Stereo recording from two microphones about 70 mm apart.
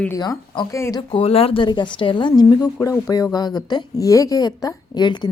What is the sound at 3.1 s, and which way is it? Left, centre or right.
Speech, left.